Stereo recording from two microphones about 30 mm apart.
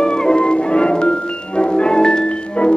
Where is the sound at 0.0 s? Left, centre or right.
Left.